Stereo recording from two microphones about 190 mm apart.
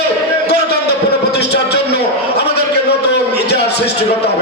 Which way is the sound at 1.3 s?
60° left (ahead or behind).